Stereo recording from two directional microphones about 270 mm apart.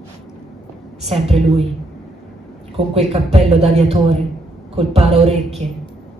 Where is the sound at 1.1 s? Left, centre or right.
Right.